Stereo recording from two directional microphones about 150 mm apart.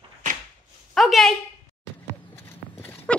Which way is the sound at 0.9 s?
Centre (ahead or behind).